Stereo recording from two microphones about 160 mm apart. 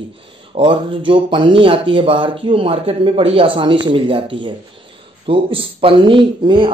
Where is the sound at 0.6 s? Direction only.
30° right (ahead or behind).